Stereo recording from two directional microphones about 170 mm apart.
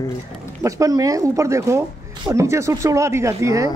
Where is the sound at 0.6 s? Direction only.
20° right (ahead or behind).